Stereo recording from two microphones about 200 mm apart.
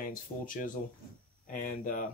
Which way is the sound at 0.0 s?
45° left (ahead or behind).